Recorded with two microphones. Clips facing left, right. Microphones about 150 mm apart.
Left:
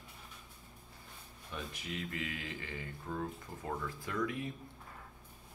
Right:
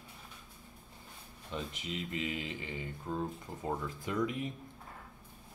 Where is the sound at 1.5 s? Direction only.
20° right (ahead or behind).